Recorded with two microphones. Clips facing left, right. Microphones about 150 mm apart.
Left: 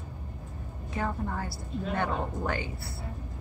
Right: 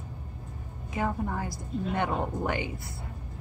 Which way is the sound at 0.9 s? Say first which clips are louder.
Right 2 dB; 15° right (ahead or behind).